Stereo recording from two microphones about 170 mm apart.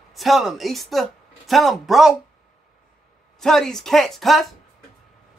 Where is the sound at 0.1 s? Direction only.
Centre (ahead or behind).